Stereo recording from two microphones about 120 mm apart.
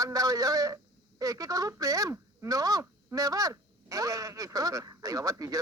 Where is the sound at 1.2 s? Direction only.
30° right (ahead or behind).